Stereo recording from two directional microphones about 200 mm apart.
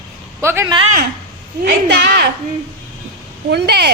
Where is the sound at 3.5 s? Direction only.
55° right (ahead or behind).